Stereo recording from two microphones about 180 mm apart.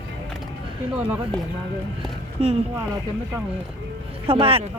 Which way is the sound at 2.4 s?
35° right (ahead or behind).